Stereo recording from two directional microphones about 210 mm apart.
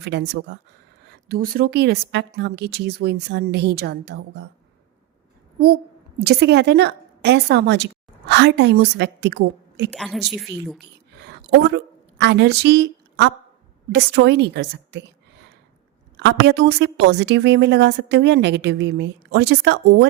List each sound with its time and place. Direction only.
0.0 s a woman's voice: 55° right (ahead or behind)
5.6 s a woman's voice: 50° right (ahead or behind)
9.9 s a woman's voice: centre (ahead or behind)
11.2 s a sound: 55° right (ahead or behind)
13.9 s a woman's voice: 55° right (ahead or behind)
16.1 s a woman's voice: 55° right (ahead or behind)